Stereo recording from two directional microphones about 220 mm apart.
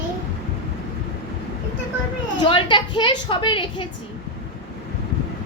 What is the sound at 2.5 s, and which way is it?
A woman's voice, 20° left (ahead or behind).